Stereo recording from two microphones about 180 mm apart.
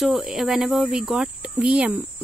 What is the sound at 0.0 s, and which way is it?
Speech, centre (ahead or behind).